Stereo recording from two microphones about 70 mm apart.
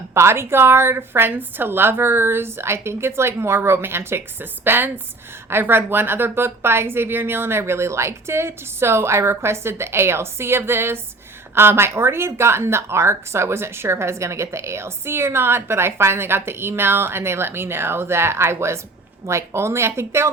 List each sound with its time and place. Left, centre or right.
0.1 s speech: right